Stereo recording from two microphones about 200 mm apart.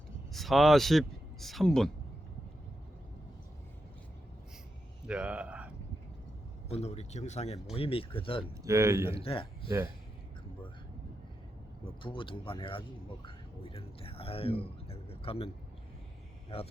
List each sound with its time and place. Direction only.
0.3 s a man's voice: centre (ahead or behind)
5.0 s speech: 5° right (ahead or behind)
6.7 s speech: 30° left (ahead or behind)
8.6 s speech: 15° right (ahead or behind)
9.1 s speech: 25° left (ahead or behind)
9.6 s speech: 15° right (ahead or behind)
11.9 s speech: 25° left (ahead or behind)
16.5 s speech: 30° left (ahead or behind)